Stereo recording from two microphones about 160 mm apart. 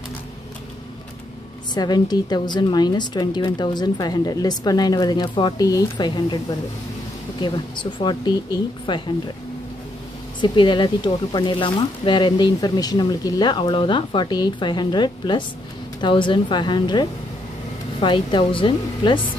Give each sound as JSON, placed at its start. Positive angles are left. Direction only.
{"t": 1.7, "sound": "speech", "side_deg": 25}
{"t": 10.4, "sound": "speech", "side_deg": 30}